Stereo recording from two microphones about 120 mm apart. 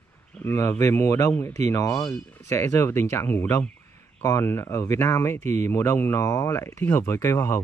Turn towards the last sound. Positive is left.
turn(degrees=20)  # may be behind; listen again after turning